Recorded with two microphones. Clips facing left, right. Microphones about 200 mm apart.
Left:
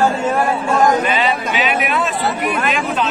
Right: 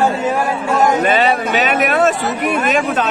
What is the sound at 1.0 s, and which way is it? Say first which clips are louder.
Speech: right 4 dB; 45° right (ahead or behind).